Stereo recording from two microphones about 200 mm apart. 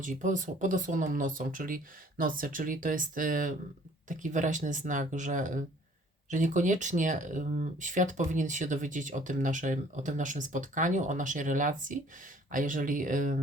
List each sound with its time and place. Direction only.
0.0 s speech: 40° right (ahead or behind)